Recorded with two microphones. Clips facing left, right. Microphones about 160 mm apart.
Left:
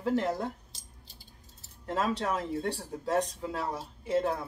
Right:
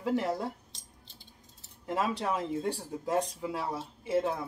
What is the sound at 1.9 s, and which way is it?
Speech, 15° right (ahead or behind).